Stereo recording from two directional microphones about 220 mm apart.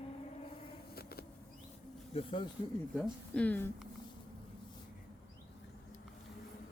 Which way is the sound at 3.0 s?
5° left (ahead or behind).